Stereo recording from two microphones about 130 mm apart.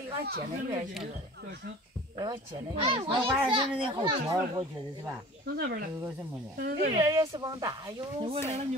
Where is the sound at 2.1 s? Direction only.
30° right (ahead or behind).